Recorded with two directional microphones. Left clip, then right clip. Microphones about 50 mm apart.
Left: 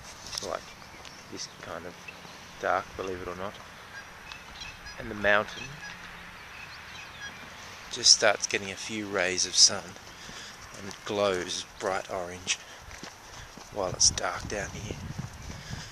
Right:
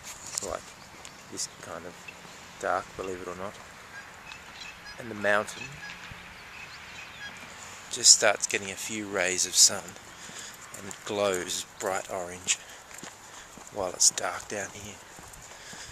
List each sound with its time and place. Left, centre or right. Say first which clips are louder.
2.6 s speech: left 1 dB; centre
4.3 s fowl: left 1 dB; centre
5.4 s speech: left 1 dB; right
7.9 s speech: right 1 dB; right
8.3 s speech: even; centre
13.7 s speech: left 1 dB; centre